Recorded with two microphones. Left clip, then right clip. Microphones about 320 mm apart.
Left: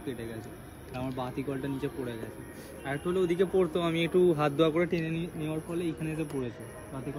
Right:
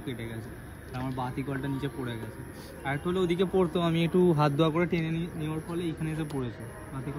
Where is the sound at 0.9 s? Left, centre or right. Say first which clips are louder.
Right 1 dB; centre.